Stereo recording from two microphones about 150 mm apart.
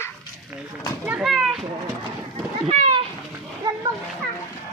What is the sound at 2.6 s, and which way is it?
Speech, 50° right (ahead or behind).